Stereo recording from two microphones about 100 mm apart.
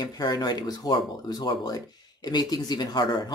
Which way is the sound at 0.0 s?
45° left (ahead or behind).